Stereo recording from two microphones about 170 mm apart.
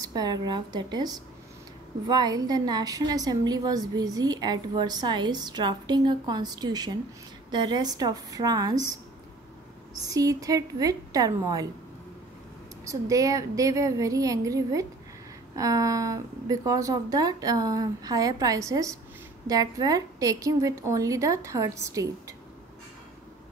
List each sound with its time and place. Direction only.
0.0 s a woman's voice: 20° right (ahead or behind)
10.0 s a woman's voice: 20° right (ahead or behind)
12.8 s a woman's voice: 20° right (ahead or behind)